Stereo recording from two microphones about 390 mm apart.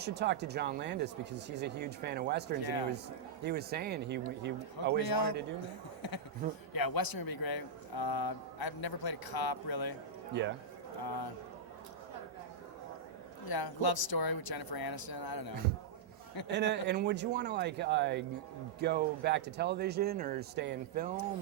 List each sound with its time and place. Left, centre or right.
0.0 s speech: right
2.6 s speech: left
3.4 s speech: right
4.9 s speech: left
6.0 s a sound: left
6.7 s speech: left
10.4 s speech: right
11.0 s a man's voice: left
13.5 s speech: left
16.5 s speech: right